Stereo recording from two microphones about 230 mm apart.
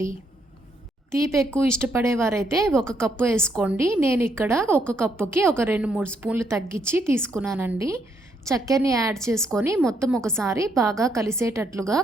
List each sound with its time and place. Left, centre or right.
1.1 s a woman's voice: centre
2.6 s a woman's voice: centre
3.0 s a woman's voice: centre